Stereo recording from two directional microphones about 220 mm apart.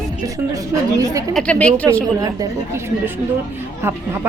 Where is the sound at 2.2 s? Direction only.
15° right (ahead or behind).